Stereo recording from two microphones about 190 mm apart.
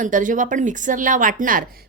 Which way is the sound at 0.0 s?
45° right (ahead or behind).